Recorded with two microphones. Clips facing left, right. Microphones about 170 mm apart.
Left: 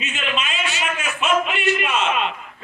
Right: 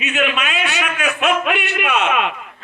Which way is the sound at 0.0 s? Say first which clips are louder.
Right 6 dB; 65° right (ahead or behind).